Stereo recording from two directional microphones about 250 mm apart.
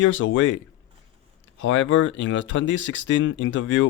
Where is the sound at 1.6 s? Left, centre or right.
Left.